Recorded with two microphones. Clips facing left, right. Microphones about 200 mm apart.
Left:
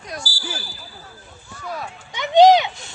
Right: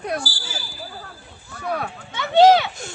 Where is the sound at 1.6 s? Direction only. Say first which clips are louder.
Right 5 dB; 60° right (ahead or behind).